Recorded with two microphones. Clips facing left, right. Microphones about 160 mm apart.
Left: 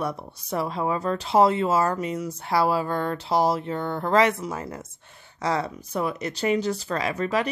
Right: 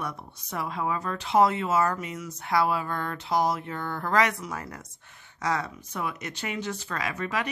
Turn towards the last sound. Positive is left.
turn(degrees=30)  # may be behind; listen again after turning